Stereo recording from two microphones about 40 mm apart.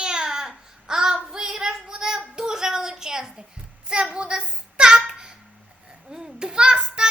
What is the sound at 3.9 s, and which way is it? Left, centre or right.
Child singing, right.